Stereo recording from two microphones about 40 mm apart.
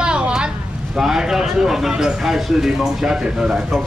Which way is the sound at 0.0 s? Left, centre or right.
Right.